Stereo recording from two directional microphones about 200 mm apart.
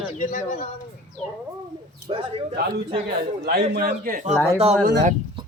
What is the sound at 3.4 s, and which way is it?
Speech, 50° right (ahead or behind).